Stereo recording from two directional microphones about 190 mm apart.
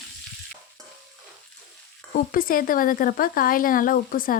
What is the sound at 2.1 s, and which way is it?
A woman's voice, 50° left (ahead or behind).